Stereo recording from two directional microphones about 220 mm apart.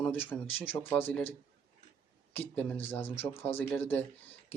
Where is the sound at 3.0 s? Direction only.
25° left (ahead or behind).